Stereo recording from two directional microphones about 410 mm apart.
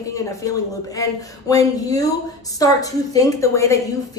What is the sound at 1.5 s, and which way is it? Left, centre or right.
A woman's voice, centre.